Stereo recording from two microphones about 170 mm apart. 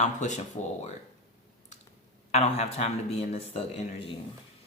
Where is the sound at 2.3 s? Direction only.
40° left (ahead or behind).